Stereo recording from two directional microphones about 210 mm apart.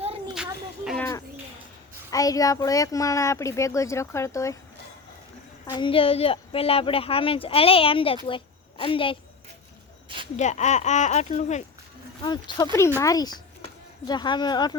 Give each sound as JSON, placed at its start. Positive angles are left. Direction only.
{"t": 0.0, "sound": "a sound", "side_deg": -25}
{"t": 0.9, "sound": "a sound", "side_deg": 10}
{"t": 2.0, "sound": "a child's voice", "side_deg": 15}
{"t": 5.6, "sound": "speech", "side_deg": 20}
{"t": 10.3, "sound": "speech", "side_deg": 35}
{"t": 12.2, "sound": "a child's voice", "side_deg": 20}